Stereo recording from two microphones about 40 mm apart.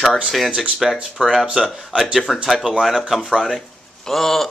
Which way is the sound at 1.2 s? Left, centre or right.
Right.